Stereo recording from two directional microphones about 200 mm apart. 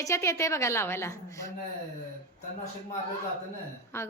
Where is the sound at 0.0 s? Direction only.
15° left (ahead or behind).